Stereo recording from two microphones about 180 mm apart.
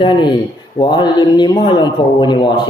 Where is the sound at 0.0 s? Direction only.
25° left (ahead or behind).